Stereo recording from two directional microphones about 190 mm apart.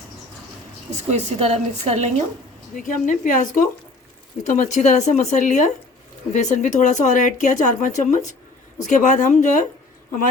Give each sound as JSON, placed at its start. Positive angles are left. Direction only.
{"t": 0.9, "sound": "a woman's voice", "side_deg": -35}
{"t": 2.7, "sound": "a woman's voice", "side_deg": 45}